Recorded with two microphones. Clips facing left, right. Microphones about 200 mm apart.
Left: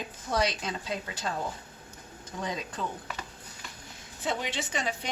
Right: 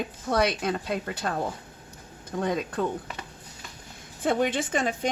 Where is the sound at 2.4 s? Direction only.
55° right (ahead or behind).